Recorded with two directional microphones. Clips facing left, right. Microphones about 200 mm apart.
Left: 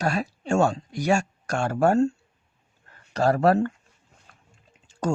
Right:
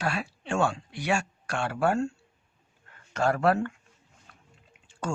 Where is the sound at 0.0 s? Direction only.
40° left (ahead or behind).